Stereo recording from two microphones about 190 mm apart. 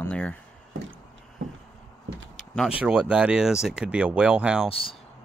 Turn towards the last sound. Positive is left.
turn(degrees=30)  # may be behind; listen again after turning